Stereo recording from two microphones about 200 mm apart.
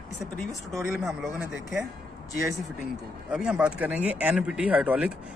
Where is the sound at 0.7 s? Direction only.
10° right (ahead or behind).